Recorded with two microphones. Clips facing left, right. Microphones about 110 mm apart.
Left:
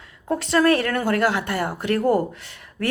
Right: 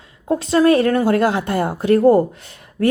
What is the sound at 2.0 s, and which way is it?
Speech, 35° right (ahead or behind).